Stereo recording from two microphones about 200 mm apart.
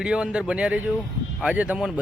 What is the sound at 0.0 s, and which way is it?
Speech, 5° right (ahead or behind).